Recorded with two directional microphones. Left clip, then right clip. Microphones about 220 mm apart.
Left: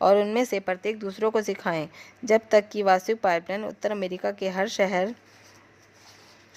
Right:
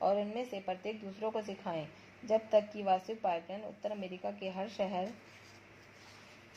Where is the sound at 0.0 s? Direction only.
40° left (ahead or behind).